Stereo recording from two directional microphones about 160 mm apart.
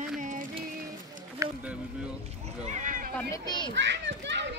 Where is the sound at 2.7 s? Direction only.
55° right (ahead or behind).